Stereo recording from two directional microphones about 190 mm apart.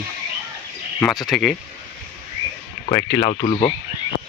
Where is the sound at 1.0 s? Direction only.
Centre (ahead or behind).